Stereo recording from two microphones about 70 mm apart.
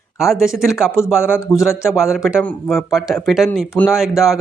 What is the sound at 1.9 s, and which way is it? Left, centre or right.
Speech, centre.